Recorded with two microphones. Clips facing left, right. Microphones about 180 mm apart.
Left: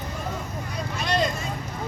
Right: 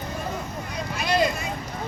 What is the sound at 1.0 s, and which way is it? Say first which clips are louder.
Vehicle: right 2 dB; 5° right (ahead or behind).